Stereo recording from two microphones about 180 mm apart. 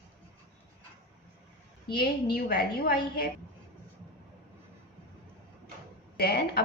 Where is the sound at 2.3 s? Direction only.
55° left (ahead or behind).